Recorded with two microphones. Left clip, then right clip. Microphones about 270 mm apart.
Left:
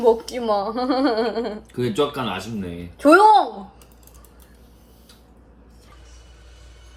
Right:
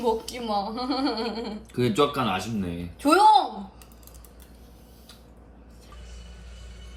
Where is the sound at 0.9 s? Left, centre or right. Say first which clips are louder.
Left 7 dB; centre.